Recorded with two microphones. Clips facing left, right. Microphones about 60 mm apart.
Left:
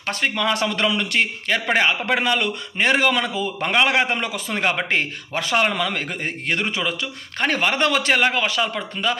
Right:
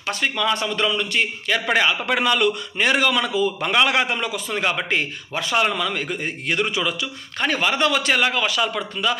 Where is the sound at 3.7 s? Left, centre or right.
Left.